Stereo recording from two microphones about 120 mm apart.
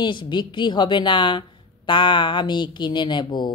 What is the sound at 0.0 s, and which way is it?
Speech, 40° left (ahead or behind).